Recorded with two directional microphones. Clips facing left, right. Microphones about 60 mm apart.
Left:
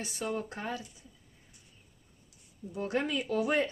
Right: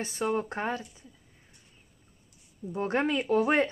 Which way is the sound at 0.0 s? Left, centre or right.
Right.